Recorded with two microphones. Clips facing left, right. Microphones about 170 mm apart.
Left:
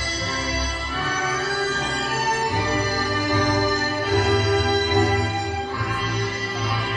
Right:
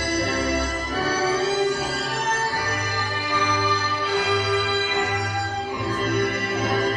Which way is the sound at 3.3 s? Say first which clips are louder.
Left 2 dB; 45° left (ahead or behind).